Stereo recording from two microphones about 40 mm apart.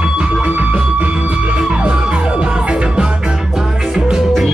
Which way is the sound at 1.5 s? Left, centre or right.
Right.